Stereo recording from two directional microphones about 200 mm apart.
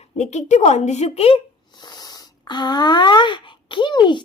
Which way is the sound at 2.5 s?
20° left (ahead or behind).